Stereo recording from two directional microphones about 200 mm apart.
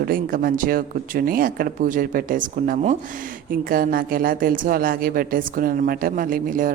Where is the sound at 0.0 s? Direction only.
45° right (ahead or behind).